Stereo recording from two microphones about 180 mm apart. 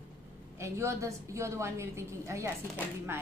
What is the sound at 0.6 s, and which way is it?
A woman's voice, 15° right (ahead or behind).